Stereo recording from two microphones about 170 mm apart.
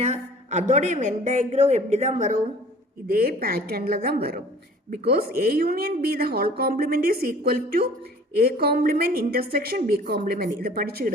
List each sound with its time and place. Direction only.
0.0 s a woman's voice: 40° right (ahead or behind)
3.1 s speech: 60° right (ahead or behind)